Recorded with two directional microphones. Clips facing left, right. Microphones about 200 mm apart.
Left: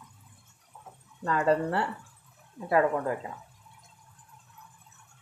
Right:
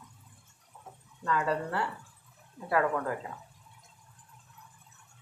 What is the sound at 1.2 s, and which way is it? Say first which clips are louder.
Speech: left 5 dB; 40° left (ahead or behind).